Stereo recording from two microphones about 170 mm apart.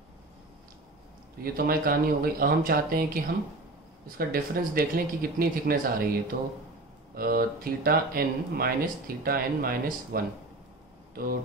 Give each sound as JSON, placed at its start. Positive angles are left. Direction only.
{"t": 1.4, "sound": "speech", "side_deg": -60}
{"t": 4.3, "sound": "speech", "side_deg": -60}
{"t": 6.3, "sound": "speech", "side_deg": -75}
{"t": 7.2, "sound": "speech", "side_deg": -60}